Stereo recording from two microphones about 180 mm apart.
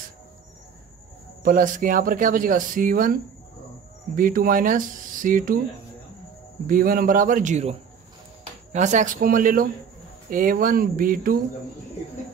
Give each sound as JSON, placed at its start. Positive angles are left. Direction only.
{"t": 1.4, "sound": "speech", "side_deg": -50}
{"t": 6.7, "sound": "speech", "side_deg": -50}
{"t": 8.7, "sound": "speech", "side_deg": -40}